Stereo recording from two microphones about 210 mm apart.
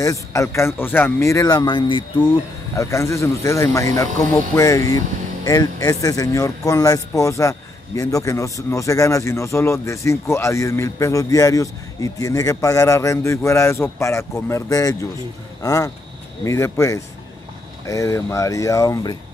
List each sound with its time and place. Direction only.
0.0 s speech: 15° left (ahead or behind)